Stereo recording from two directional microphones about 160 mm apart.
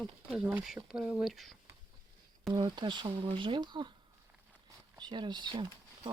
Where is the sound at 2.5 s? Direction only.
30° right (ahead or behind).